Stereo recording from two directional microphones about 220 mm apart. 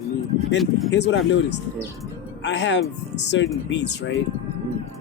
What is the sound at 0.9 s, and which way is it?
Speech, 55° left (ahead or behind).